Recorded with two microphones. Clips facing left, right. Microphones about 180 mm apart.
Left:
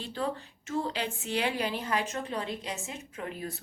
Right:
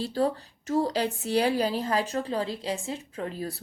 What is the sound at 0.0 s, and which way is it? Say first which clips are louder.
A woman's voice: right 7 dB; 35° right (ahead or behind).